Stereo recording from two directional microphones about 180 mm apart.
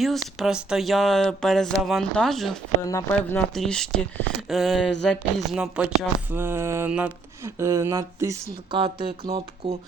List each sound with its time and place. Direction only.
0.0 s speech: centre (ahead or behind)
2.8 s speech: 15° left (ahead or behind); by 8.4 s 15° right (ahead or behind)
8.7 s speech: 30° right (ahead or behind)